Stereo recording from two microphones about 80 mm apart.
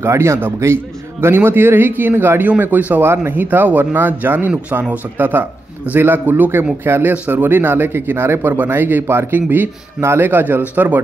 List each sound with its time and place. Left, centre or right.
0.0 s a man's voice: right